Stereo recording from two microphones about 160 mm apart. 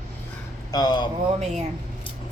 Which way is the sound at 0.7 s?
25° left (ahead or behind).